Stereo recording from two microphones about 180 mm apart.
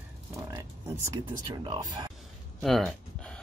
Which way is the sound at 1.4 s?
25° right (ahead or behind).